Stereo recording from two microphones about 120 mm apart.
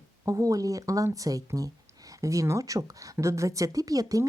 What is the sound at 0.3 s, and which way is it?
A woman's voice, 30° right (ahead or behind).